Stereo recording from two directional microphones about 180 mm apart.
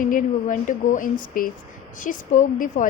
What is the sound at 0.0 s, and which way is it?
A woman's voice, 50° left (ahead or behind).